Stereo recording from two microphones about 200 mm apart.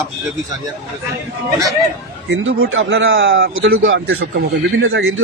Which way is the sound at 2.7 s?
65° right (ahead or behind).